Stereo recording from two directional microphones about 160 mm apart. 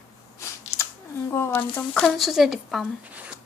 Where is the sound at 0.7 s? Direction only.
45° left (ahead or behind).